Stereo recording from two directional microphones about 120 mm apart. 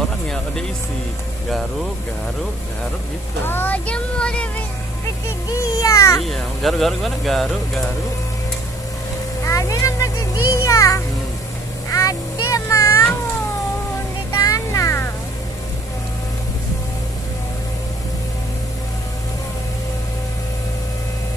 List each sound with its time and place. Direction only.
3.4 s speech: 15° left (ahead or behind)
5.5 s a child's voice: 30° left (ahead or behind)
6.2 s speech: centre (ahead or behind)
9.4 s music: 25° left (ahead or behind)
11.9 s vehicle: 30° left (ahead or behind)
14.3 s music: 30° left (ahead or behind)